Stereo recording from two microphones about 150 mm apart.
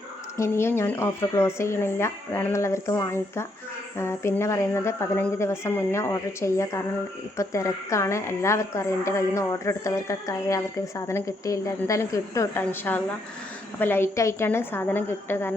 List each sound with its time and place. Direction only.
0.3 s a woman's voice: 15° left (ahead or behind)